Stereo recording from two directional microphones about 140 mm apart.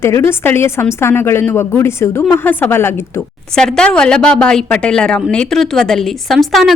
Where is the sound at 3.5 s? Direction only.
5° left (ahead or behind).